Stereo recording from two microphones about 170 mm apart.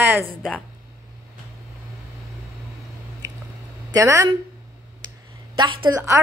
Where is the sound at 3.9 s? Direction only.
20° right (ahead or behind).